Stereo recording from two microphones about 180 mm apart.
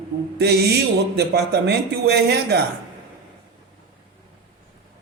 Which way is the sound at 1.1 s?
65° right (ahead or behind).